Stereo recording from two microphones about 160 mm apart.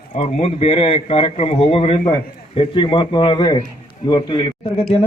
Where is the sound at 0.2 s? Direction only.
40° left (ahead or behind).